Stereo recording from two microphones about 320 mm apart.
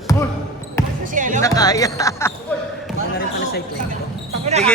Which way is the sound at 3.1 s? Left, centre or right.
Left.